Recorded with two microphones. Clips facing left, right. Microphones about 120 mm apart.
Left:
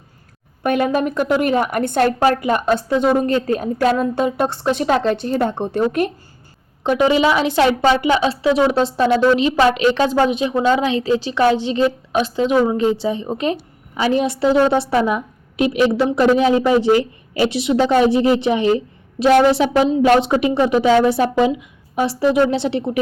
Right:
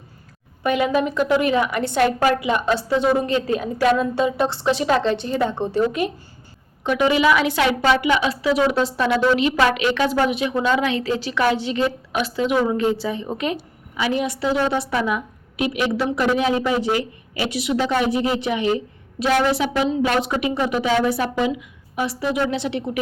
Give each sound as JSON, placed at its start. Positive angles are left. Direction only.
{"t": 0.6, "sound": "a woman's voice", "side_deg": 50}
{"t": 6.8, "sound": "a woman's voice", "side_deg": 30}